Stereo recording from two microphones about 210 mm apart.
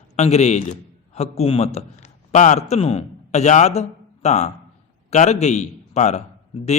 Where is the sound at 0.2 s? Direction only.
30° left (ahead or behind).